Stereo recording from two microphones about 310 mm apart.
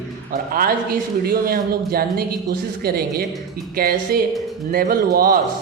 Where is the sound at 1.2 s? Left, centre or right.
Right.